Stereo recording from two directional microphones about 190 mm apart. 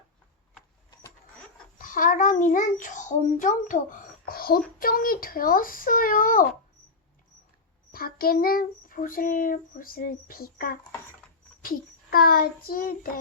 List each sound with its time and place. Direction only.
1.8 s a child's voice: 45° left (ahead or behind)
4.8 s child singing: 50° left (ahead or behind)
7.9 s child singing: 50° left (ahead or behind)